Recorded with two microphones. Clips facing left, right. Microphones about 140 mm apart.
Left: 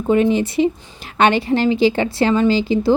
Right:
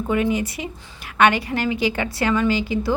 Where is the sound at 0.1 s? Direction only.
30° left (ahead or behind).